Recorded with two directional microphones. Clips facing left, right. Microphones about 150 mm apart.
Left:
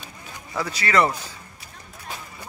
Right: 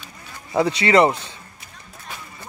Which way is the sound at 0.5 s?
25° right (ahead or behind).